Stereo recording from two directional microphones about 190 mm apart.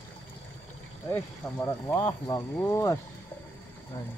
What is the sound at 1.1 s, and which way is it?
Speech, 10° left (ahead or behind).